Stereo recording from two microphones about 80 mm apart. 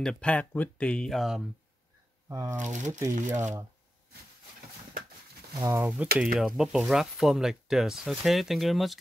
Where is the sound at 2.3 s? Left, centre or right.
Right.